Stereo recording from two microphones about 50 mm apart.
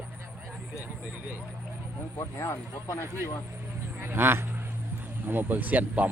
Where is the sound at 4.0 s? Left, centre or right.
Right.